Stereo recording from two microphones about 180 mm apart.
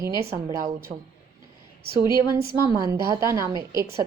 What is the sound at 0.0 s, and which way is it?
Speech, 15° right (ahead or behind).